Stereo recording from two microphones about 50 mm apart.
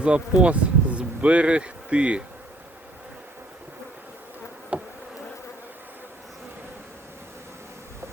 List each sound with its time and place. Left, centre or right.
0.0 s speech: right
4.7 s bee: right